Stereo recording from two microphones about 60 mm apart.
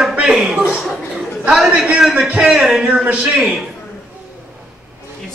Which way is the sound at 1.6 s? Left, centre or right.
Centre.